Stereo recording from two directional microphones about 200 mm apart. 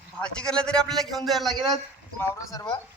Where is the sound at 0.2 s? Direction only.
5° left (ahead or behind).